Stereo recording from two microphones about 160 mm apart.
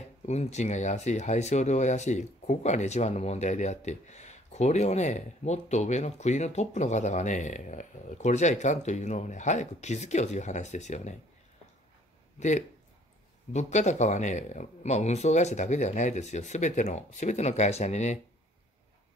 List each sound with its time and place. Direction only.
0.3 s speech: 45° left (ahead or behind)
12.4 s speech: 45° left (ahead or behind)